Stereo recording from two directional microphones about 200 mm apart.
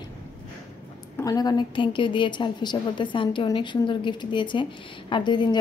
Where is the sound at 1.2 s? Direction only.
20° left (ahead or behind).